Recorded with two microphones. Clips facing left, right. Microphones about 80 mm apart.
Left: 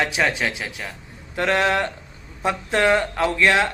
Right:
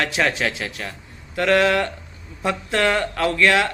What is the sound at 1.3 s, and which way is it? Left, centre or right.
Speech, left.